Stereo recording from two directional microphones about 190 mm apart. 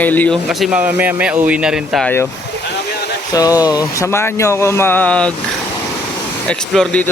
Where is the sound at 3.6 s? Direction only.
20° left (ahead or behind).